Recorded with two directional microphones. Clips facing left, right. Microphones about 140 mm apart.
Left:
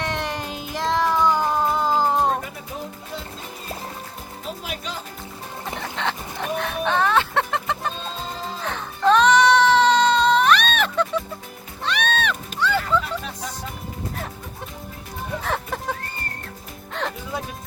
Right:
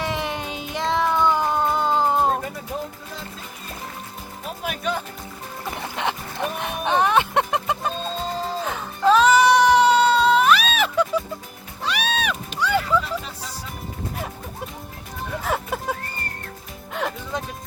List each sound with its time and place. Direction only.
0.0 s music: centre (ahead or behind)
4.6 s music: 55° right (ahead or behind)
6.0 s music: 15° right (ahead or behind)
8.6 s music: 5° right (ahead or behind)
15.4 s music: 10° right (ahead or behind)